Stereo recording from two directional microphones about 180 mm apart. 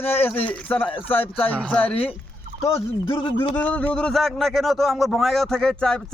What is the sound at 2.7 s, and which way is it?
Speech, 30° left (ahead or behind).